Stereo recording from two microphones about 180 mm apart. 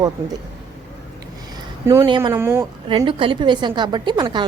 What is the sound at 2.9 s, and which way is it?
Speech, 30° right (ahead or behind).